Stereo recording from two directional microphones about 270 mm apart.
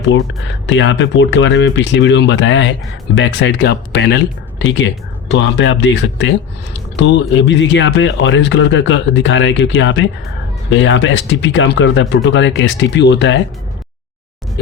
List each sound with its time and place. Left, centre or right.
0.7 s speech: left
5.3 s speech: left